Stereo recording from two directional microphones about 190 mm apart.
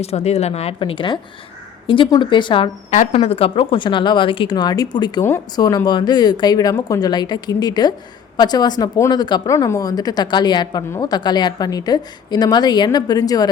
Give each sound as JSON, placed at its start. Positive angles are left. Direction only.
{"t": 0.0, "sound": "speech", "side_deg": 35}